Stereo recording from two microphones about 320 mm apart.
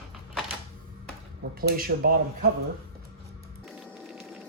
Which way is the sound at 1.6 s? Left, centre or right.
Right.